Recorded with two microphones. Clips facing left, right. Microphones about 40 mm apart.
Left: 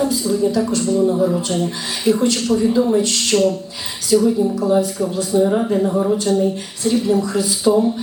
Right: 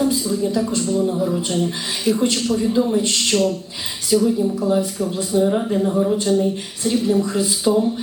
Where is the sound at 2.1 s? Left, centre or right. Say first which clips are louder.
Left 3 dB; left.